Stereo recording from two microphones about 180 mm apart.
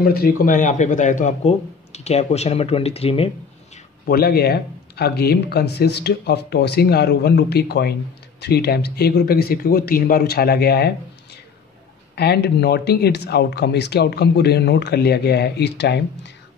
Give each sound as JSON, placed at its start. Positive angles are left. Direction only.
{"t": 0.0, "sound": "speech", "side_deg": 55}
{"t": 4.1, "sound": "speech", "side_deg": 55}
{"t": 12.2, "sound": "speech", "side_deg": 65}